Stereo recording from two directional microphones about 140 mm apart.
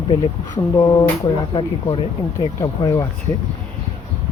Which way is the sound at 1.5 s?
35° left (ahead or behind).